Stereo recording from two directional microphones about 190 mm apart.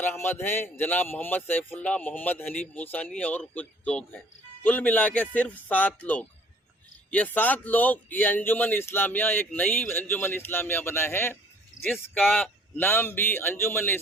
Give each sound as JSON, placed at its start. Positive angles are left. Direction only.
{"t": 0.0, "sound": "a man's voice", "side_deg": 10}